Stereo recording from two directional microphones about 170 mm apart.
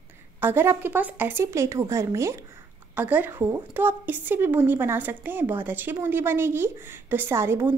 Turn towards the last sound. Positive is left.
turn(degrees=-15)  # may be behind; listen again after turning